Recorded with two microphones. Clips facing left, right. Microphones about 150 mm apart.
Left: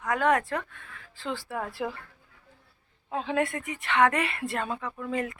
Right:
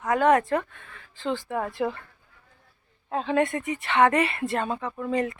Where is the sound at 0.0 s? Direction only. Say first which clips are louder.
Right 4 dB; centre (ahead or behind).